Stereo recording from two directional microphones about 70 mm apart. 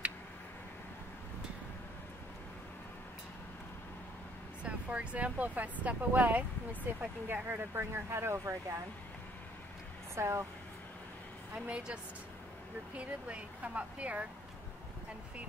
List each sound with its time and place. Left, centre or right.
4.6 s speech: centre
7.4 s speech: right
10.1 s speech: right
11.5 s speech: centre